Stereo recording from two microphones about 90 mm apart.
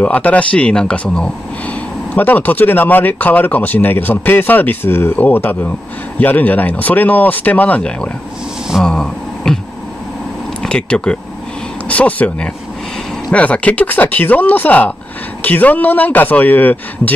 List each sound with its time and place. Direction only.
0.0 s speech: 15° left (ahead or behind)
8.6 s a sound: centre (ahead or behind)
10.6 s speech: 10° left (ahead or behind)